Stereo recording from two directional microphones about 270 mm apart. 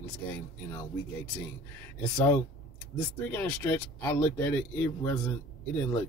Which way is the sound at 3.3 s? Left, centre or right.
Centre.